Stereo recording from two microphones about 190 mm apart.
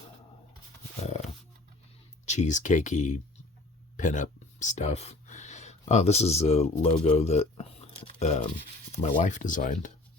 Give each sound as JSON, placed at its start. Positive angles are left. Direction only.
{"t": 2.2, "sound": "speech", "side_deg": 40}